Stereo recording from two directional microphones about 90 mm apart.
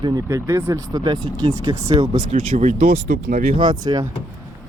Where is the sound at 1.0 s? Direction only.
55° right (ahead or behind).